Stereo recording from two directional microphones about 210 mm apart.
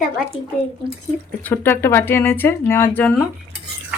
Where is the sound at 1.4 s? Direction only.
10° left (ahead or behind).